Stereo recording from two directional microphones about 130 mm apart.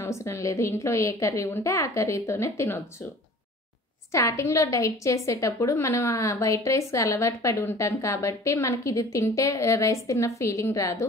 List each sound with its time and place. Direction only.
0.0 s a woman's voice: 20° left (ahead or behind)
4.1 s a woman's voice: 25° left (ahead or behind)